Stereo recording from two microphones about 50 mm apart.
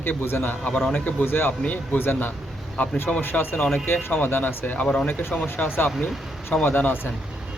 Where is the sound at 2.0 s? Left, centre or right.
Left.